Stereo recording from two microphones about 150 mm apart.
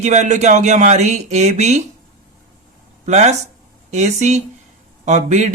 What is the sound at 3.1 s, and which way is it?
Speech, 50° right (ahead or behind).